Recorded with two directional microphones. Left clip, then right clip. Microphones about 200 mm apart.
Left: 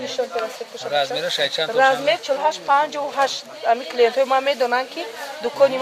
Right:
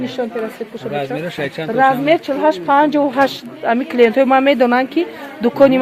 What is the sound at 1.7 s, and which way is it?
A woman's voice, 45° right (ahead or behind).